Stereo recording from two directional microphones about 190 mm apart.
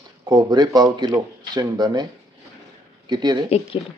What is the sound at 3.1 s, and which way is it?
Speech, 20° right (ahead or behind).